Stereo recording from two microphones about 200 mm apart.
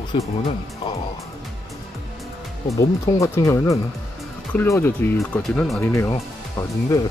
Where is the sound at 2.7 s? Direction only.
15° left (ahead or behind).